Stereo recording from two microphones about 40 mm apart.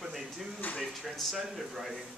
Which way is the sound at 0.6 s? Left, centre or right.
Left.